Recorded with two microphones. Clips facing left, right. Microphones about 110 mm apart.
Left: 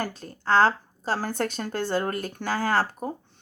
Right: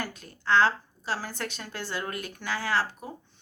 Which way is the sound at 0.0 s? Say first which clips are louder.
Left 4 dB; 35° left (ahead or behind).